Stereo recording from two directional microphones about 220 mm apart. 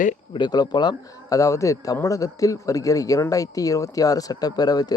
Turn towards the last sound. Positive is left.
turn(degrees=20)  # may be behind; listen again after turning